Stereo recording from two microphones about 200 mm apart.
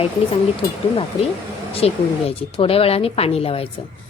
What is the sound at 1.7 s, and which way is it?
Speech, 30° left (ahead or behind).